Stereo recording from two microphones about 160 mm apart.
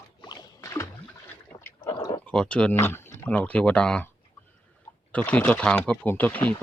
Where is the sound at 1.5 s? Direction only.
15° left (ahead or behind).